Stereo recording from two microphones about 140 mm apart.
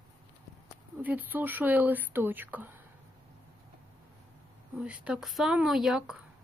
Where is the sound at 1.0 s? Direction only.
10° right (ahead or behind).